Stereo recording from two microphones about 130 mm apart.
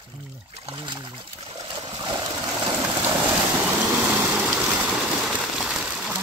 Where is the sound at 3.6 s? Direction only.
15° right (ahead or behind).